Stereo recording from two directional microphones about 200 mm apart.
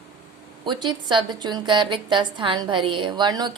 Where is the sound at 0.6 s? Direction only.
20° right (ahead or behind).